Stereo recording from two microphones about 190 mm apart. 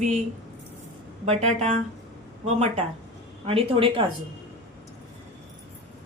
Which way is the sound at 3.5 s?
30° right (ahead or behind).